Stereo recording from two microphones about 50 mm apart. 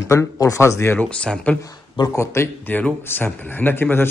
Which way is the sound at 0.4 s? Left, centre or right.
Left.